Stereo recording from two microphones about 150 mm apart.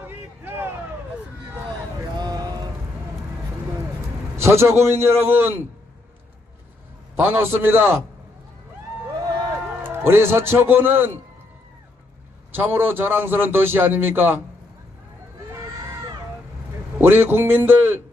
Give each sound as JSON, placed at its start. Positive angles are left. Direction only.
{"t": 0.0, "sound": "a sound", "side_deg": -15}
{"t": 2.1, "sound": "a sound", "side_deg": -25}
{"t": 4.4, "sound": "a man's voice", "side_deg": -15}
{"t": 7.2, "sound": "a man's voice", "side_deg": -15}
{"t": 9.8, "sound": "a man's voice", "side_deg": -15}
{"t": 12.5, "sound": "a man's voice", "side_deg": -15}
{"t": 17.0, "sound": "a man's voice", "side_deg": -15}